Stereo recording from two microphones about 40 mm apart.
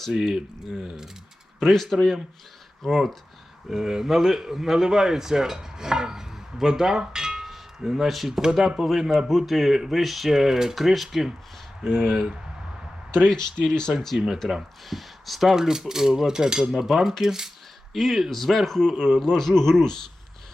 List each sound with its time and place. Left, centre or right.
0.1 s speech: centre
1.6 s speech: centre
3.7 s a man's voice: centre
13.1 s speech: centre
14.2 s speech: right
14.8 s speech: centre
17.9 s speech: centre
19.2 s speech: centre